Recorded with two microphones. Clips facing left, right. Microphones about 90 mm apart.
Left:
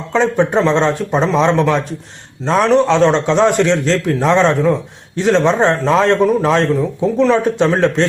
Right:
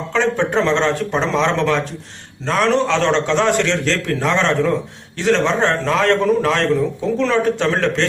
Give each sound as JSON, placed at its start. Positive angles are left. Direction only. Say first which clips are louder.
{"t": 0.1, "sound": "a man's voice", "louder": "left 4 dB", "side_deg": 15}